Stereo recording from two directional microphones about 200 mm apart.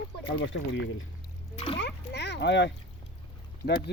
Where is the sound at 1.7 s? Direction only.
60° left (ahead or behind).